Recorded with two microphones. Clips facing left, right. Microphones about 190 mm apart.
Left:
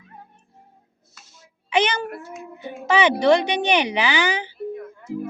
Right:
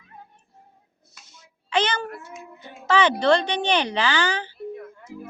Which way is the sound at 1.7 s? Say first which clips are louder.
Left 3 dB; 15° left (ahead or behind).